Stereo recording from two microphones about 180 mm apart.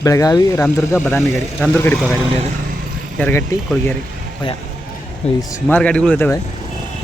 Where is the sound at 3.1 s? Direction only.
10° left (ahead or behind).